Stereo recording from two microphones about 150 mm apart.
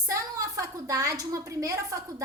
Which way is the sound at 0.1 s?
20° right (ahead or behind).